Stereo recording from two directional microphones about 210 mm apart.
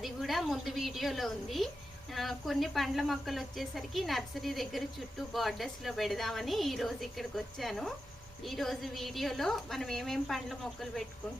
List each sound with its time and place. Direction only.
0.0 s speech: centre (ahead or behind)